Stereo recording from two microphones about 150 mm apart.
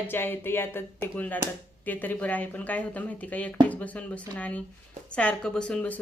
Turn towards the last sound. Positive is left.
turn(degrees=10)  # may be behind; listen again after turning